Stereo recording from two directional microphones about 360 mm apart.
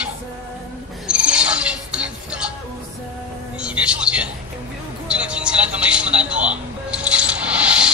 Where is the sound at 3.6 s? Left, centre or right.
Centre.